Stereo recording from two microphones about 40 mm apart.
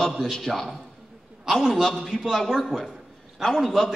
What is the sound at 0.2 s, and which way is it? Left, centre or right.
A man's voice, centre.